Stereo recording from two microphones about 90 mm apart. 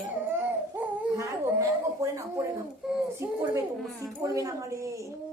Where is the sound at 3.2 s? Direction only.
30° right (ahead or behind).